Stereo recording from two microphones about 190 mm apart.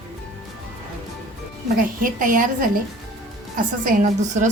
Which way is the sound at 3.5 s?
45° right (ahead or behind).